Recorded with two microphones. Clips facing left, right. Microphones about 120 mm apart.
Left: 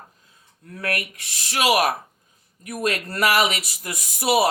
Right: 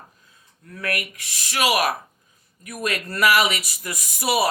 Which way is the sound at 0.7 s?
40° left (ahead or behind).